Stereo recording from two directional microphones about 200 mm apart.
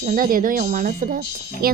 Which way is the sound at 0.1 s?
45° right (ahead or behind).